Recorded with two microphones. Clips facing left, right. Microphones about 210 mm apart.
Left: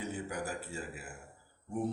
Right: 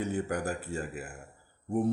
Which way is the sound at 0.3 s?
10° left (ahead or behind).